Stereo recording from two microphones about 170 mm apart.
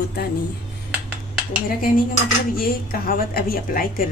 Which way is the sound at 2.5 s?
60° left (ahead or behind).